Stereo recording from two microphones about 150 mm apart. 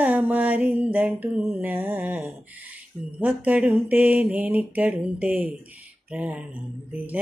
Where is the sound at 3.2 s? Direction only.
10° right (ahead or behind).